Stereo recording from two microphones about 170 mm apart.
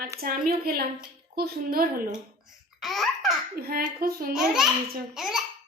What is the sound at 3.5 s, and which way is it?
Speech, 60° right (ahead or behind).